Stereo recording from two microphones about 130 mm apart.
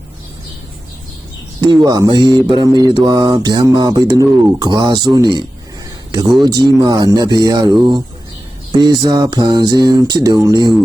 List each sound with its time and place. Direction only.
1.6 s mantra: 35° right (ahead or behind)
6.1 s speech: 30° right (ahead or behind)
6.4 s mantra: 30° right (ahead or behind)